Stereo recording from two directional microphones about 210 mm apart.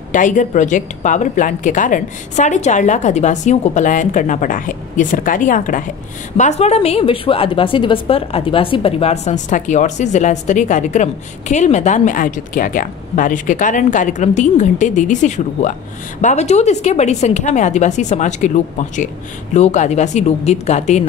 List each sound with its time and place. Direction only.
0.1 s a woman's voice: 35° left (ahead or behind)